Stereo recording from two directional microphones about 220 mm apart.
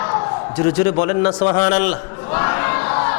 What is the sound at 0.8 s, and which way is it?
A man's voice, 20° left (ahead or behind).